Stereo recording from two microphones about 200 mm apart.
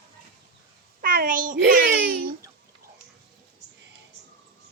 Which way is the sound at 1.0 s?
45° right (ahead or behind).